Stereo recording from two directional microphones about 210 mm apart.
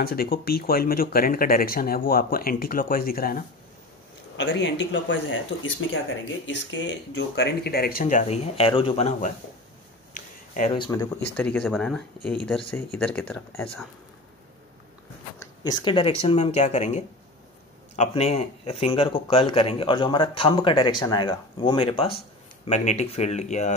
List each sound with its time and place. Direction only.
0.0 s speech: 45° left (ahead or behind)
4.4 s speech: 55° left (ahead or behind); by 9.3 s 30° left (ahead or behind)
10.1 s a sound: 40° left (ahead or behind)
10.7 s speech: 20° left (ahead or behind)
15.3 s speech: 20° left (ahead or behind); by 23.7 s 35° left (ahead or behind)